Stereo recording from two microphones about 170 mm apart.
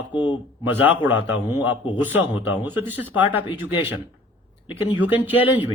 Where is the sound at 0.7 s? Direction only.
10° right (ahead or behind).